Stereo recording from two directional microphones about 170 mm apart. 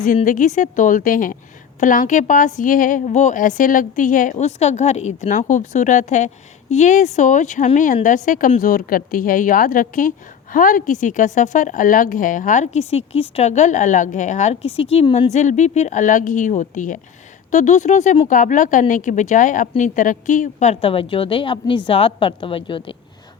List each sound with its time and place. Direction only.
0.0 s a woman's voice: 45° left (ahead or behind); by 23.0 s 30° left (ahead or behind)